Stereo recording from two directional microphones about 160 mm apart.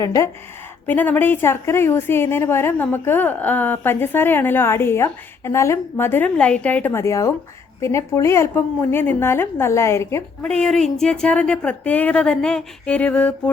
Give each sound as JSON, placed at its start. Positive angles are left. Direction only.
{"t": 0.0, "sound": "speech", "side_deg": 20}
{"t": 0.9, "sound": "a woman's voice", "side_deg": 10}
{"t": 10.4, "sound": "a woman's voice", "side_deg": 5}